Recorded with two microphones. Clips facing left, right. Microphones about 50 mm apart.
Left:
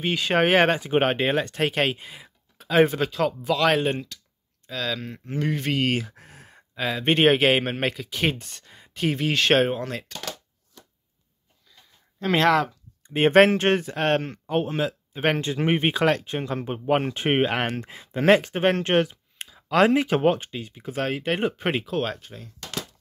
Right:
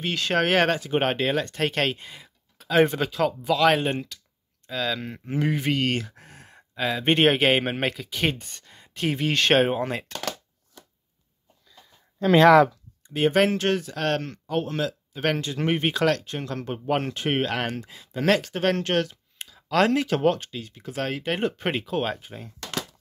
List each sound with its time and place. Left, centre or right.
0.0 s speech: centre
5.8 s speech: centre
9.8 s speech: centre
13.1 s speech: left
17.7 s speech: left
19.4 s speech: centre